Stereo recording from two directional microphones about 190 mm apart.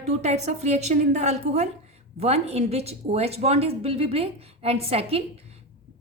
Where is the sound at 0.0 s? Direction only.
35° right (ahead or behind).